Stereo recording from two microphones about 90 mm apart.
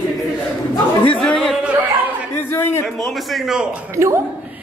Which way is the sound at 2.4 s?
25° left (ahead or behind).